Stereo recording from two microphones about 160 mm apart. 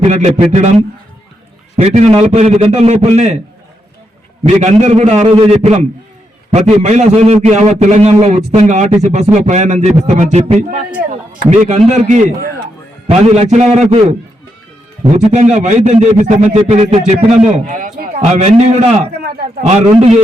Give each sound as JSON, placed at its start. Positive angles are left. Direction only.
{"t": 0.1, "sound": "a man's voice", "side_deg": -45}
{"t": 4.4, "sound": "a man's voice", "side_deg": -50}
{"t": 15.2, "sound": "a man's voice", "side_deg": -45}
{"t": 17.7, "sound": "a man's voice", "side_deg": -55}
{"t": 19.2, "sound": "a man's voice", "side_deg": -70}
{"t": 19.6, "sound": "a man's voice", "side_deg": -45}